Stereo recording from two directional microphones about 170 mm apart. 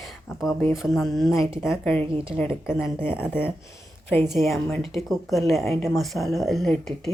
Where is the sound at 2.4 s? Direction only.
15° left (ahead or behind).